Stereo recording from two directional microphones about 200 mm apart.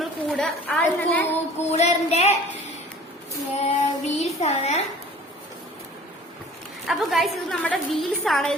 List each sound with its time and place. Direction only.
0.0 s a woman's voice: centre (ahead or behind)
1.7 s child singing: 35° left (ahead or behind)
3.6 s child singing: 35° left (ahead or behind)
6.8 s a woman's voice: centre (ahead or behind)